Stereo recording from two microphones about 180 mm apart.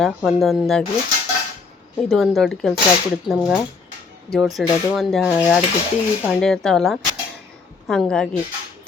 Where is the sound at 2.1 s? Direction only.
Centre (ahead or behind).